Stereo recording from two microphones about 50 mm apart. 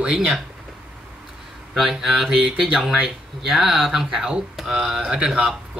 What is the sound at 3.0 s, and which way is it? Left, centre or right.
Speech, centre.